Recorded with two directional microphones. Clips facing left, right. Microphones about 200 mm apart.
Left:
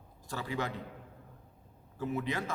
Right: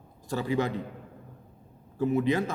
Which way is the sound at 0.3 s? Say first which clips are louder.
Right 8 dB; 25° right (ahead or behind).